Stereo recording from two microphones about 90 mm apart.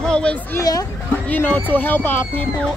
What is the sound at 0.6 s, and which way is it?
Speech, 40° left (ahead or behind).